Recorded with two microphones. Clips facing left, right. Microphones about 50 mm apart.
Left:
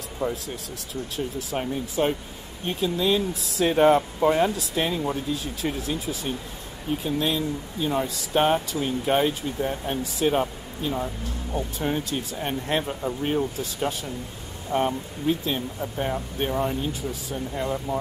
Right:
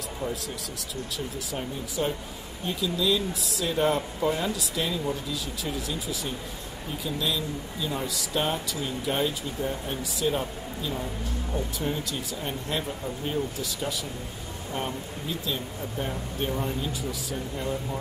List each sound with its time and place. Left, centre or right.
0.2 s speech: left
14.7 s speech: left
15.2 s speech: left